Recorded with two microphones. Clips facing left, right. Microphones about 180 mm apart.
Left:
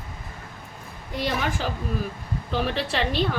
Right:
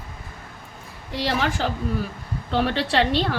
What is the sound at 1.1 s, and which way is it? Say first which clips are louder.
A woman's voice: right 3 dB; 80° right.